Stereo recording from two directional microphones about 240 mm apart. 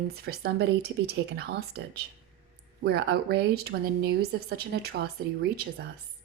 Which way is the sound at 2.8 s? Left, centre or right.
Right.